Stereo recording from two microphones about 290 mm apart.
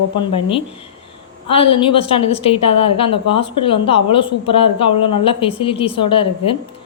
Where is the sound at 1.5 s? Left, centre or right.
Centre.